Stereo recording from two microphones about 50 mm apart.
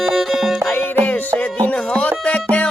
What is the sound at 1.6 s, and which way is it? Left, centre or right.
Music, left.